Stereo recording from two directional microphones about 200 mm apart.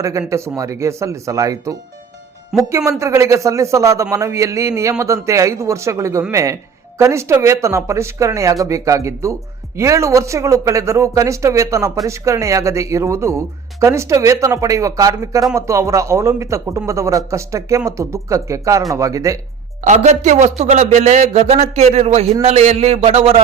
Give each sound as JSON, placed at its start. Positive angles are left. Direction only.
{"t": 0.0, "sound": "speech", "side_deg": -15}
{"t": 2.5, "sound": "speech", "side_deg": 0}
{"t": 3.0, "sound": "speech", "side_deg": -15}
{"t": 19.8, "sound": "speech", "side_deg": -35}